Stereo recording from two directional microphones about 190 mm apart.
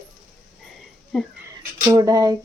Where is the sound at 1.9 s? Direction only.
20° right (ahead or behind).